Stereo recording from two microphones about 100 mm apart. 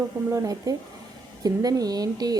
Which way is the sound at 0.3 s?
35° right (ahead or behind).